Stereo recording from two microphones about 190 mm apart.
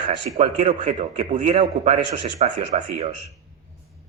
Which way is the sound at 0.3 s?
40° right (ahead or behind).